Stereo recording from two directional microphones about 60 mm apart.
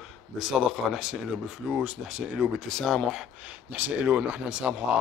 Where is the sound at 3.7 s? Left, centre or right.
Right.